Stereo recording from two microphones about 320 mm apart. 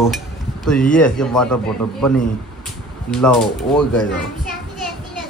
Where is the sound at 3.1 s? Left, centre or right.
Centre.